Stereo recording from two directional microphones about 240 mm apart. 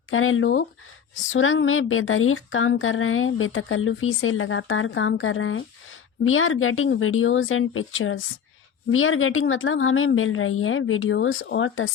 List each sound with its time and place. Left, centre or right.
0.1 s speech: left